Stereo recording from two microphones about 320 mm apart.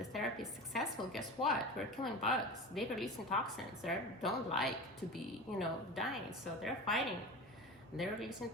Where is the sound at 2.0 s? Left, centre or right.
Centre.